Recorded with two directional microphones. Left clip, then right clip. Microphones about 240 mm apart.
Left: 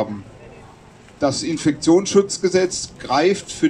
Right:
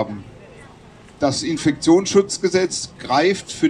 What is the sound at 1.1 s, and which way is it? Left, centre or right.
A man's voice, right.